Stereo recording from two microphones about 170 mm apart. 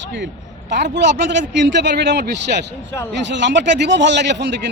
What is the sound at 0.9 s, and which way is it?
A man's voice, 90° right.